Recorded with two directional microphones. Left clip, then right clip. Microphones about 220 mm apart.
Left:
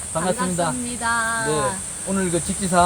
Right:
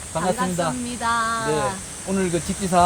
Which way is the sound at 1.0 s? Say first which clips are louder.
Even; 20° right (ahead or behind).